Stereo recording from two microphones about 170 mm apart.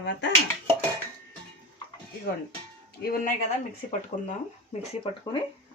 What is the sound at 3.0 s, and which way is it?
Speech, 65° left (ahead or behind).